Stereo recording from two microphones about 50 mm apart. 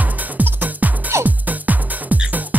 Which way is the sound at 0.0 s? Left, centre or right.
Right.